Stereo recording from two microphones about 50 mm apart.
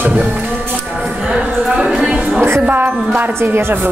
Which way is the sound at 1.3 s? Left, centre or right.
Centre.